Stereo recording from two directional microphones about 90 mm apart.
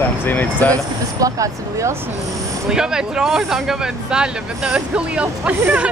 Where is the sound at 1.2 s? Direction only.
35° right (ahead or behind).